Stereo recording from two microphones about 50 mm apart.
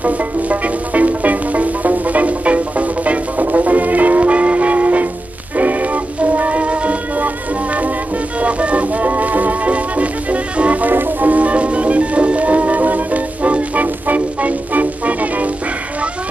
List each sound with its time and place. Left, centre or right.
0.0 s music: right
8.4 s music: right